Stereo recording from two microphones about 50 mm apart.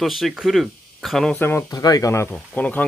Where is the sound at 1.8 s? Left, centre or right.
Left.